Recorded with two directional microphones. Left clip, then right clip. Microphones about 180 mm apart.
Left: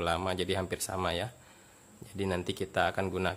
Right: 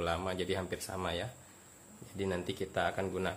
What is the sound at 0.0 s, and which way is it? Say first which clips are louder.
A man's voice: left 4 dB; 45° left (ahead or behind).